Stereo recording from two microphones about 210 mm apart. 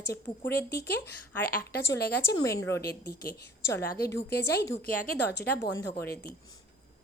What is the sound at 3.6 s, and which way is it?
Speech, 10° left (ahead or behind).